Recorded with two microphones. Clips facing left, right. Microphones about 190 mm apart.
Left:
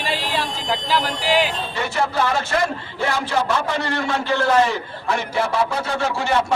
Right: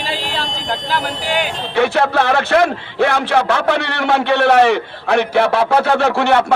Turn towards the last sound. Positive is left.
turn(degrees=-70)  # may be behind; listen again after turning